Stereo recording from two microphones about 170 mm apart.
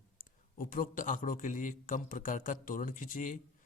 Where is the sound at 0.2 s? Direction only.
55° left (ahead or behind).